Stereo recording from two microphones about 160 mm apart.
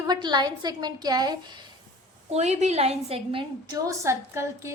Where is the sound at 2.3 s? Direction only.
45° right (ahead or behind).